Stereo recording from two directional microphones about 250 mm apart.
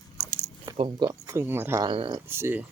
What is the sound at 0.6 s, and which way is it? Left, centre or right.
Speech, centre.